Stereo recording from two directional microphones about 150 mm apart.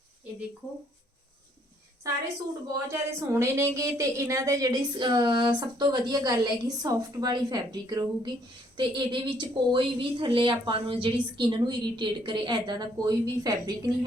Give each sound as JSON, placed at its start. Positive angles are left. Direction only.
{"t": 2.9, "sound": "a woman's voice", "side_deg": -20}